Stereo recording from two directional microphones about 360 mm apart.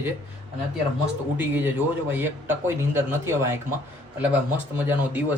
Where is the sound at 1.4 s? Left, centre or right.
Centre.